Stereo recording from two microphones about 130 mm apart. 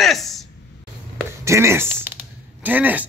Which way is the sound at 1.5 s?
20° right (ahead or behind).